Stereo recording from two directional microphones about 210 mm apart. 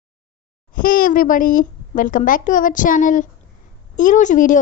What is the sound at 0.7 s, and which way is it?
A woman's voice, 40° left (ahead or behind).